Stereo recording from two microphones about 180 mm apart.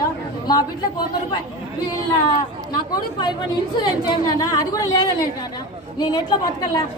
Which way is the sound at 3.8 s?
20° left (ahead or behind).